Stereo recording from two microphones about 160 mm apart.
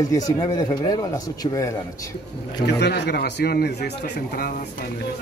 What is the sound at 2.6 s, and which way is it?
A man's voice, 90° left.